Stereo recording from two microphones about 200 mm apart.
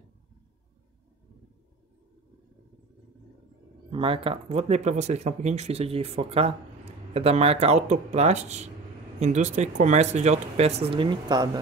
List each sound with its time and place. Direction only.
3.9 s speech: 25° right (ahead or behind)